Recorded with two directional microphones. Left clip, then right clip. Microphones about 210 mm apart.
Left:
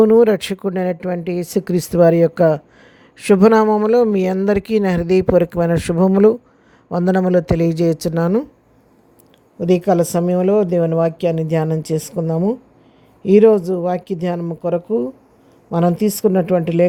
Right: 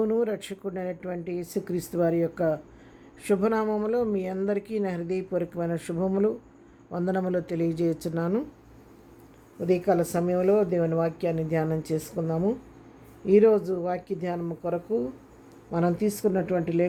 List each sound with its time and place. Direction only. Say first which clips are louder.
0.0 s speech: left 15 dB; 45° left (ahead or behind)
9.6 s speech: left 9 dB; 45° left (ahead or behind)